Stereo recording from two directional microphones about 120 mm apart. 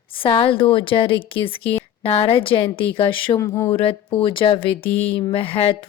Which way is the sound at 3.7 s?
50° left (ahead or behind).